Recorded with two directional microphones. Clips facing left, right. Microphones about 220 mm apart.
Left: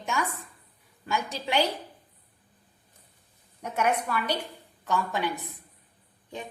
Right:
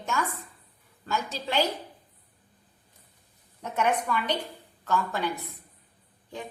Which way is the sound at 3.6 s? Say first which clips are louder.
Even; 10° left (ahead or behind).